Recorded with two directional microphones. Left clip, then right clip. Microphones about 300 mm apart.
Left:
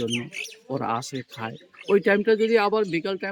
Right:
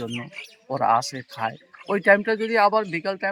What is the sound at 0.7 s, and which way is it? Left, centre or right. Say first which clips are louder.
Speech: right 7 dB; centre.